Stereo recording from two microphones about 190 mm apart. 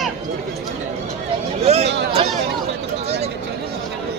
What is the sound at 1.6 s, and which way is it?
Hubbub, 35° right (ahead or behind).